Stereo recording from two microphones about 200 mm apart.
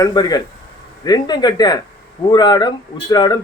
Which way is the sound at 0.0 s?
20° left (ahead or behind).